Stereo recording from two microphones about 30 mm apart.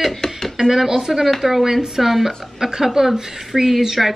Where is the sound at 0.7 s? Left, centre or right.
Centre.